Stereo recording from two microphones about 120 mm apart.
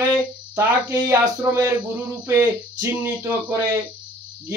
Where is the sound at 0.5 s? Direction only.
25° right (ahead or behind).